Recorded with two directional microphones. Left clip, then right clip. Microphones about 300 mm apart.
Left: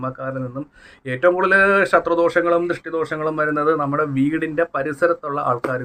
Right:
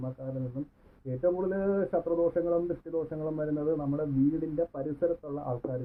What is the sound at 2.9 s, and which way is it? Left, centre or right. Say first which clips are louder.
Speech: left 12 dB; left.